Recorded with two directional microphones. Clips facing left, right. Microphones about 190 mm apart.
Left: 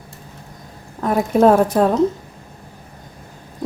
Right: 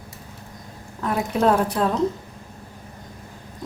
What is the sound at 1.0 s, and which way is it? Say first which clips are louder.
Speech: left 7 dB; 45° left (ahead or behind).